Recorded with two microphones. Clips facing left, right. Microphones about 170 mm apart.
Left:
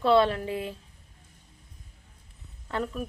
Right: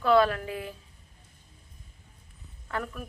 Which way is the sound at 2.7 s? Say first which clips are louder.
Left 4 dB; 25° left (ahead or behind).